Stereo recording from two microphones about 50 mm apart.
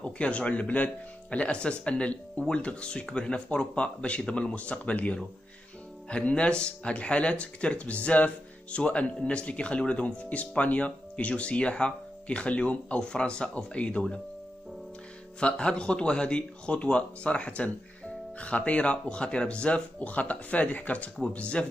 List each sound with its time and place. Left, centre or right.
0.0 s speech: left
15.4 s speech: centre